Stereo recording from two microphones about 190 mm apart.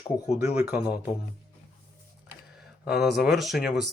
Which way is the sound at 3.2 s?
Centre (ahead or behind).